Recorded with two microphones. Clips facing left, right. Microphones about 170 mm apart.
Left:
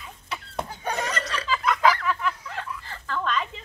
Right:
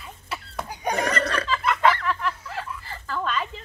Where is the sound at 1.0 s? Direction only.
60° right (ahead or behind).